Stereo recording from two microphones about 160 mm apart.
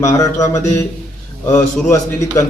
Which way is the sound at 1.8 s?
20° left (ahead or behind).